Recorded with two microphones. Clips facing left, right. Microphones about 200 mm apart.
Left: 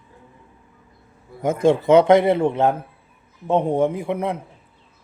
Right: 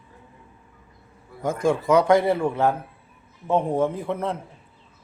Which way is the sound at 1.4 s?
20° left (ahead or behind).